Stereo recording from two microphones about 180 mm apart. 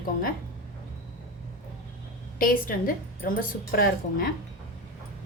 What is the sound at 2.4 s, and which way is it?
A woman's voice, 50° left (ahead or behind).